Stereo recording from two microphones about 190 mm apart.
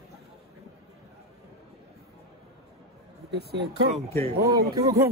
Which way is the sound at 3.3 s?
60° right (ahead or behind).